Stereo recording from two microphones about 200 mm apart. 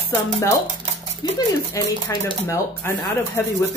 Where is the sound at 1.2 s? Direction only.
20° left (ahead or behind).